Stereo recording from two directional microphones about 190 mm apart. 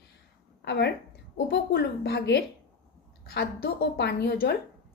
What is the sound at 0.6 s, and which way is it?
A woman's voice, 60° left (ahead or behind).